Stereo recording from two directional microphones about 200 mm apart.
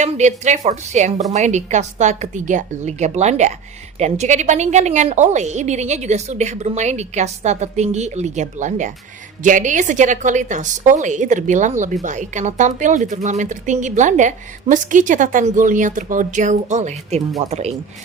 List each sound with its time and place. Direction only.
0.0 s speech: 35° right (ahead or behind)